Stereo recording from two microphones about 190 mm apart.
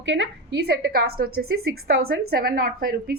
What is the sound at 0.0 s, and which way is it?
A woman's voice, 70° right (ahead or behind).